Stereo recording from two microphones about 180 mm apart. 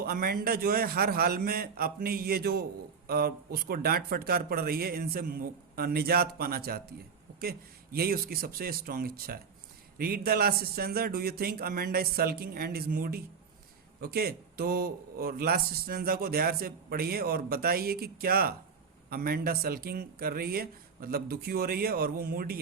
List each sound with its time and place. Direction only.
0.0 s a man's voice: 55° right (ahead or behind)
7.9 s a man's voice: 55° right (ahead or behind)